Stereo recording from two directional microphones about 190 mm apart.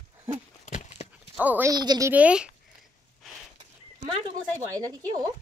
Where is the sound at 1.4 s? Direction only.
10° right (ahead or behind).